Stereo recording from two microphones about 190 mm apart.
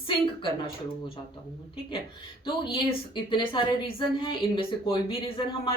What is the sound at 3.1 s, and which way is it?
A woman's voice, 25° left (ahead or behind).